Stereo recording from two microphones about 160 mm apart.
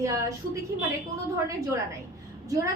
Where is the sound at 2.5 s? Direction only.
20° right (ahead or behind).